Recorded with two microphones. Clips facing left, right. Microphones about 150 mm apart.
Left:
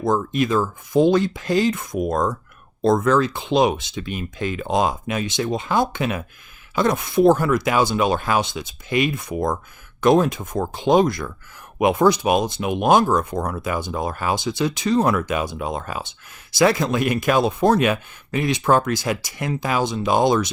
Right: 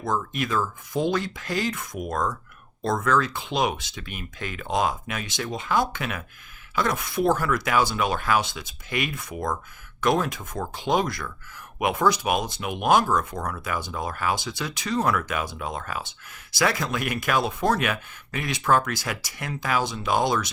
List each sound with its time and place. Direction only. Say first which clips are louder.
0.0 s speech: left 7 dB; 25° left (ahead or behind)